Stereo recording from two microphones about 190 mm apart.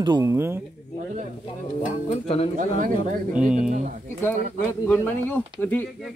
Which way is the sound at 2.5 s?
45° right (ahead or behind).